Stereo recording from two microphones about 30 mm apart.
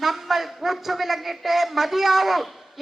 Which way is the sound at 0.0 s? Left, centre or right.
Centre.